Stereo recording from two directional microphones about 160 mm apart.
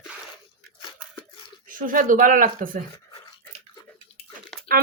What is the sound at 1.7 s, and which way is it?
A woman's voice, 55° right (ahead or behind).